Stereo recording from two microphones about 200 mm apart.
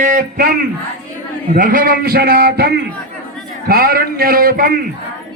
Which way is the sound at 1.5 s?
45° right (ahead or behind).